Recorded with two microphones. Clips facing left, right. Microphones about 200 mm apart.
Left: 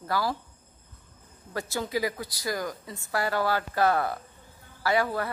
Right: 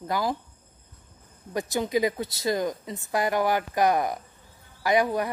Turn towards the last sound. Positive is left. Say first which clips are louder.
# right 3 dB
turn(degrees=-15)  # may be behind; listen again after turning